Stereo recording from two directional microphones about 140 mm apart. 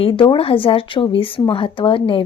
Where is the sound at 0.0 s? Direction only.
40° left (ahead or behind).